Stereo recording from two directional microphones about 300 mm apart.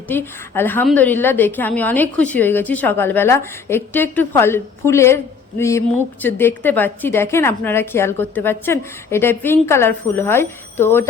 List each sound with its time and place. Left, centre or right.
0.1 s a woman's voice: centre